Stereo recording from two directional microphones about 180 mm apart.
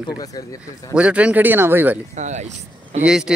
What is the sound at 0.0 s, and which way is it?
Speech, 20° left (ahead or behind).